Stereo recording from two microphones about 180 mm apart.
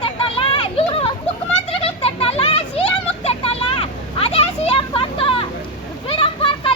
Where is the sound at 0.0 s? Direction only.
30° left (ahead or behind).